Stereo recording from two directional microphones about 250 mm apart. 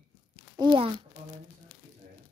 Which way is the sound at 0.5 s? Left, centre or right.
Centre.